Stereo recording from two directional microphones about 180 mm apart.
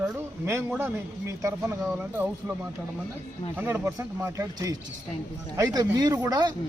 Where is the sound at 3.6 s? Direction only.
15° right (ahead or behind).